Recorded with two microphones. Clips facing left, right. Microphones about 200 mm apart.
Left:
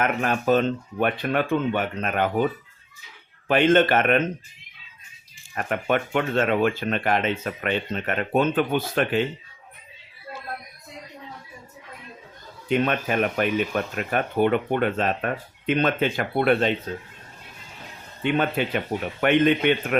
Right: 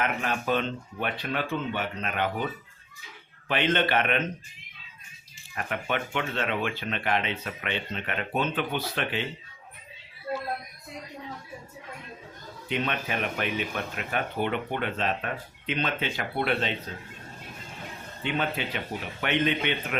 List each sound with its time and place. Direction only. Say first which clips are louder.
0.0 s speech: left 6 dB; 50° left (ahead or behind)
3.5 s speech: left 7 dB; 45° left (ahead or behind)
5.5 s speech: left 6 dB; 45° left (ahead or behind)
12.6 s speech: left 7 dB; 45° left (ahead or behind)
18.2 s speech: left 7 dB; 55° left (ahead or behind)